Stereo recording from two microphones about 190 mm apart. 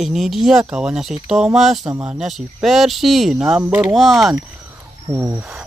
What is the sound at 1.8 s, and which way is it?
Speech, 15° right (ahead or behind).